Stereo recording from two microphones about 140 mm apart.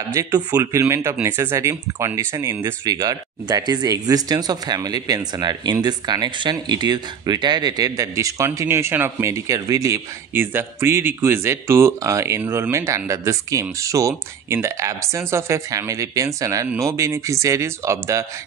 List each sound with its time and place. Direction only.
0.1 s speech: 25° right (ahead or behind)